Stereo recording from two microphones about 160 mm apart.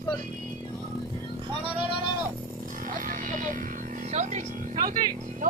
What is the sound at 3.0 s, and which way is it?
Music, 60° right (ahead or behind).